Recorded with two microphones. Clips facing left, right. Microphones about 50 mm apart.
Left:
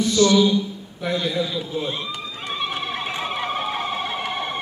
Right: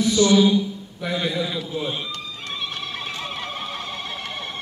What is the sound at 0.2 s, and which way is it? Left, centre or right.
A man's voice, centre.